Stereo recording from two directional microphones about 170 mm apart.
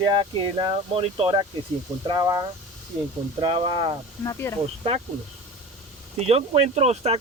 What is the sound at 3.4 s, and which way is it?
Speech, 35° right (ahead or behind).